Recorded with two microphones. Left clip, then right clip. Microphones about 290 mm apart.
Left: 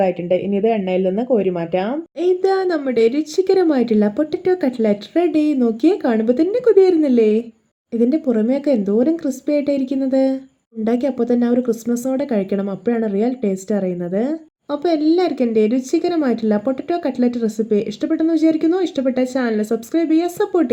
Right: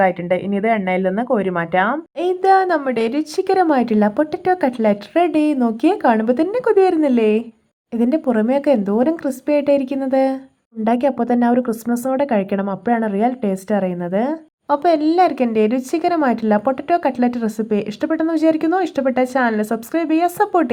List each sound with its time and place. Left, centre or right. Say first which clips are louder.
0.0 s speech: right 1 dB; centre